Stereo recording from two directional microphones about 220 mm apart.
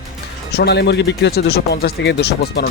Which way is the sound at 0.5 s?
50° left (ahead or behind).